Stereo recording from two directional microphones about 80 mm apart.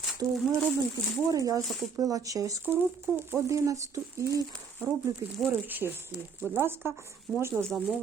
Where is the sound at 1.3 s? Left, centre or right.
Right.